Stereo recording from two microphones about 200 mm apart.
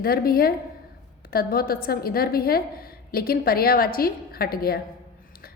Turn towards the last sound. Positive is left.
turn(degrees=50)  # may be behind; listen again after turning